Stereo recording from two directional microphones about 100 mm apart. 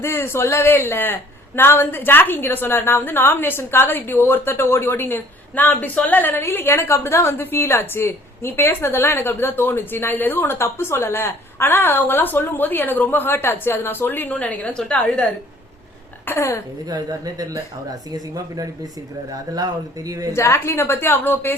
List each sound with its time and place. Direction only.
0.0 s speech: 25° left (ahead or behind)
16.2 s speech: 25° left (ahead or behind)
16.8 s speech: 40° right (ahead or behind)
20.3 s speech: 30° left (ahead or behind)